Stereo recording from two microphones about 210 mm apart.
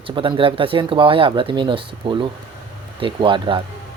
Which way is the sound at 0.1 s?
25° right (ahead or behind).